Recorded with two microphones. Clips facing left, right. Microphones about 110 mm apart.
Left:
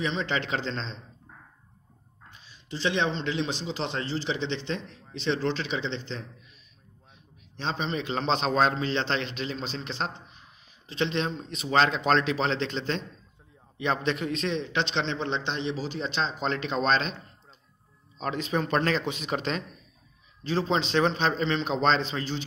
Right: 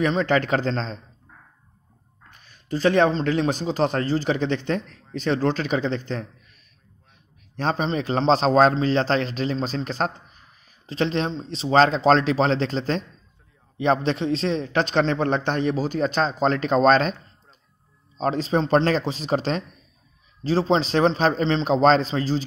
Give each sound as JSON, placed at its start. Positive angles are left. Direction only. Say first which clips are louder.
{"t": 0.0, "sound": "a man's voice", "louder": "right 8 dB", "side_deg": -45}
{"t": 2.3, "sound": "a man's voice", "louder": "right 10 dB", "side_deg": -50}
{"t": 7.5, "sound": "a man's voice", "louder": "right 7 dB", "side_deg": -45}